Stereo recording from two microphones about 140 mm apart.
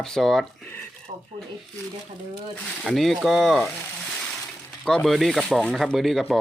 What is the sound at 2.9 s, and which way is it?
Speech, centre (ahead or behind).